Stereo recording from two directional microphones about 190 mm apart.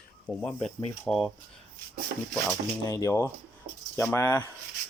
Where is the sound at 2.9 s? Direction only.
15° left (ahead or behind).